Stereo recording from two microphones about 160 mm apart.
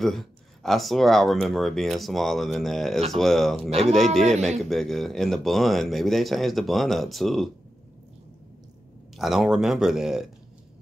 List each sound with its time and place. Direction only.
0.0 s speech: centre (ahead or behind)
4.3 s a man's voice: 40° right (ahead or behind)
4.6 s speech: centre (ahead or behind)
9.1 s speech: centre (ahead or behind)